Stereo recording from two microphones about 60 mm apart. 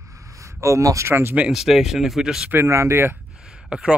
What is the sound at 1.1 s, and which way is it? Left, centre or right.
Speech, right.